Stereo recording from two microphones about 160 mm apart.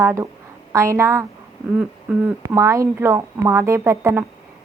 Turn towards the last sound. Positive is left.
turn(degrees=-15)  # may be behind; listen again after turning